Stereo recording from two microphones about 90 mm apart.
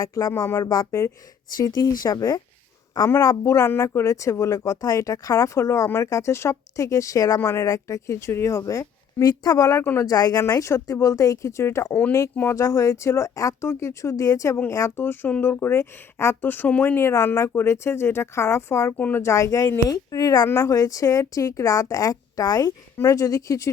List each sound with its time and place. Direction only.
0.0 s speech: 40° left (ahead or behind)
3.2 s speech: 40° left (ahead or behind)
18.9 s speech: 20° left (ahead or behind)
19.2 s speech: 35° left (ahead or behind)